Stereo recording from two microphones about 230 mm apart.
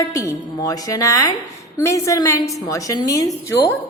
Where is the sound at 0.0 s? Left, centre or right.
Centre.